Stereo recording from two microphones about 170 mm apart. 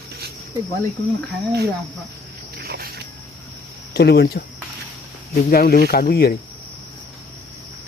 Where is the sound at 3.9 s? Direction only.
70° left (ahead or behind).